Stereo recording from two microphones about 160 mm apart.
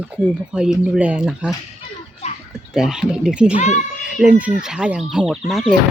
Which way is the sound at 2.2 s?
40° left (ahead or behind).